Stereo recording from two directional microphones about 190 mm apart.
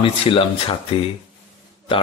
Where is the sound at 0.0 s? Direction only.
25° left (ahead or behind).